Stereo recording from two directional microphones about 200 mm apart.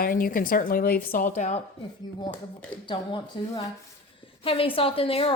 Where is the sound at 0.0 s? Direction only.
45° left (ahead or behind).